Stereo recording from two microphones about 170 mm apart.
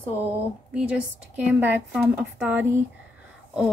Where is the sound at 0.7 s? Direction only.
10° right (ahead or behind).